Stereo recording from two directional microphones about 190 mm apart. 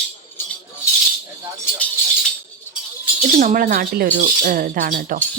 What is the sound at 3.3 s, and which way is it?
Speech, 50° right (ahead or behind).